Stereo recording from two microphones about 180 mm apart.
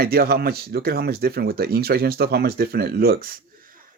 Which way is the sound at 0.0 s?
60° right (ahead or behind).